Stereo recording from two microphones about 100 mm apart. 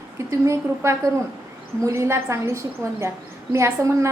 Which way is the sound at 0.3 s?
30° right (ahead or behind).